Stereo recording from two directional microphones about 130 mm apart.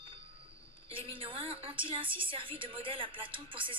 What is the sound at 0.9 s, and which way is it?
A woman's voice, 45° right (ahead or behind).